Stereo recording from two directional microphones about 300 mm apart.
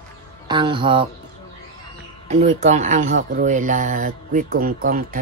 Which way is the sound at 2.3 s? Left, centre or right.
Right.